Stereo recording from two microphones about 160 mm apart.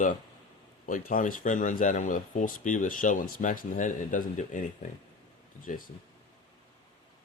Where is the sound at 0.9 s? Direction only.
60° left (ahead or behind).